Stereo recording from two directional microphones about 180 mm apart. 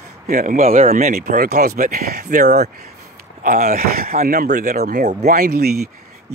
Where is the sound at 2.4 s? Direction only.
40° right (ahead or behind).